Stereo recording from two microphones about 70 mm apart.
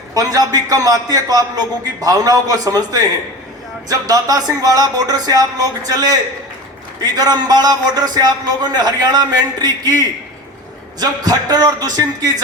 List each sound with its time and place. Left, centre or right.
0.1 s a man's voice: right
11.0 s a man's voice: right